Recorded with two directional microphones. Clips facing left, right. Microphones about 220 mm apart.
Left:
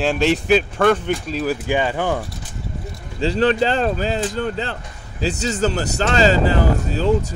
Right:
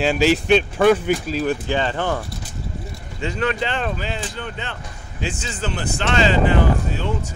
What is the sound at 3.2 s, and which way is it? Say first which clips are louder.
Speech: left 6 dB; 30° left (ahead or behind).